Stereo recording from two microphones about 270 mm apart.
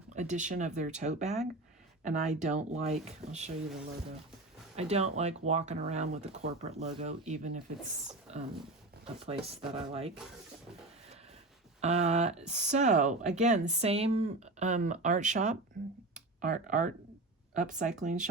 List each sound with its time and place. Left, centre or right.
0.1 s speech: right
4.8 s speech: right
8.3 s a sound: right
9.2 s speech: right
11.8 s speech: right